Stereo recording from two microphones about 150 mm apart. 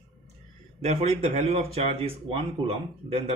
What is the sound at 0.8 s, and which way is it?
Speech, 45° right (ahead or behind).